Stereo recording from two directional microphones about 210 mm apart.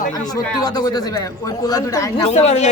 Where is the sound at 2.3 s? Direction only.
30° left (ahead or behind).